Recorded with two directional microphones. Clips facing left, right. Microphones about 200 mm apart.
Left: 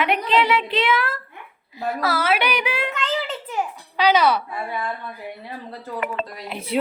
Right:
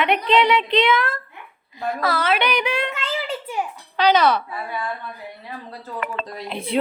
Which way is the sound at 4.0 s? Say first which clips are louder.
Right 1 dB; 10° left (ahead or behind).